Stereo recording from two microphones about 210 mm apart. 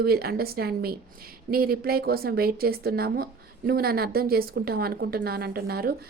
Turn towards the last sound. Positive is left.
turn(degrees=-45)  # may be behind; listen again after turning